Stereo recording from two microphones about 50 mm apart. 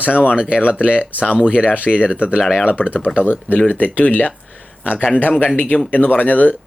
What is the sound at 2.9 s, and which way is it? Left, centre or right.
Speech, left.